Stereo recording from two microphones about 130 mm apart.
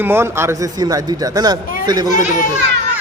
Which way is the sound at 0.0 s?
20° right (ahead or behind).